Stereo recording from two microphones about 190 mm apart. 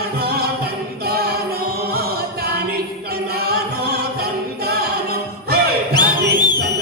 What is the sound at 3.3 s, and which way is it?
A capella, 55° right (ahead or behind).